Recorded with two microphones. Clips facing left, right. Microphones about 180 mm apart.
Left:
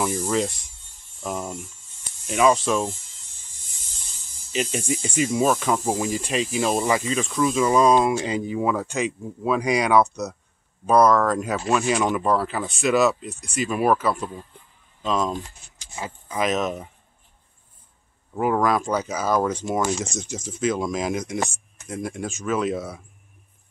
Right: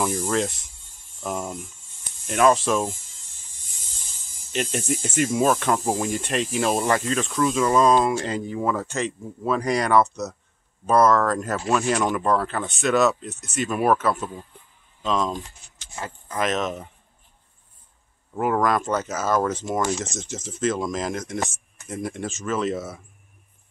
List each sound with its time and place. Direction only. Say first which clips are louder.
0.0 s speech: even; centre (ahead or behind)
4.5 s speech: even; centre (ahead or behind)
18.3 s speech: left 1 dB; centre (ahead or behind)